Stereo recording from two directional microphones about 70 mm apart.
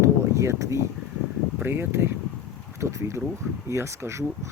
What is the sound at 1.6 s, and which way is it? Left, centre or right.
Speech, right.